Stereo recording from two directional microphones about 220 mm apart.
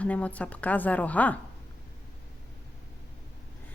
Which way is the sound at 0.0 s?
5° left (ahead or behind).